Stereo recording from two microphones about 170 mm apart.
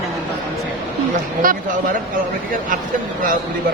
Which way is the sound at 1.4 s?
55° right (ahead or behind).